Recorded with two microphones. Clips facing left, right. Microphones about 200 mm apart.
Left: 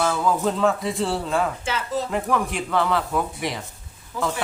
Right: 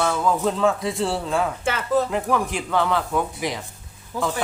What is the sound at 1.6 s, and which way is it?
Speech, 55° right (ahead or behind).